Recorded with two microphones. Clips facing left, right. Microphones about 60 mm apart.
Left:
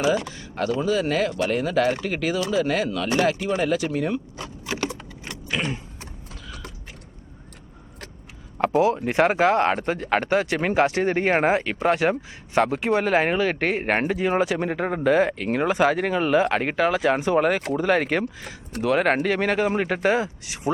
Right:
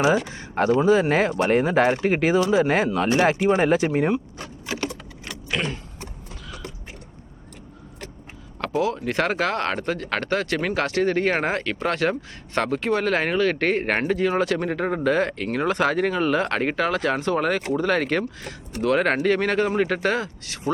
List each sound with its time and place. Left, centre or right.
0.0 s speech: right
4.9 s keys jangling: centre
8.7 s speech: left